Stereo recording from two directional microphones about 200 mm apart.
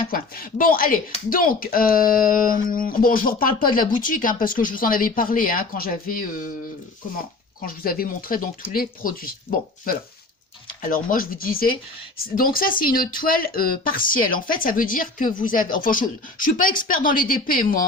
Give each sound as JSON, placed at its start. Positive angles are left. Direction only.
{"t": 0.1, "sound": "speech", "side_deg": 45}
{"t": 7.7, "sound": "speech", "side_deg": 45}